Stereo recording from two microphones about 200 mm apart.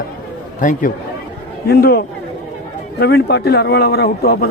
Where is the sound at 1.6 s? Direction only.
50° left (ahead or behind).